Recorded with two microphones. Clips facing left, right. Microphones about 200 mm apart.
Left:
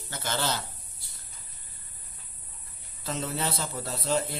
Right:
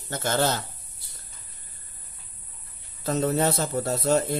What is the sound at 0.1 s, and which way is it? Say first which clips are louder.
Speech: right 7 dB; 45° right (ahead or behind).